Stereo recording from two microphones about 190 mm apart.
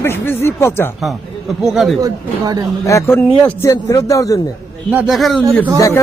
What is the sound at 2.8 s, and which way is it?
Speech, 15° left (ahead or behind).